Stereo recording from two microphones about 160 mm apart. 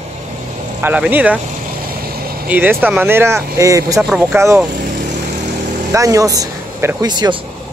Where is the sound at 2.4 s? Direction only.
10° right (ahead or behind).